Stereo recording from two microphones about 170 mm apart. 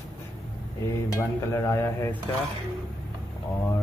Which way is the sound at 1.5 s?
15° left (ahead or behind).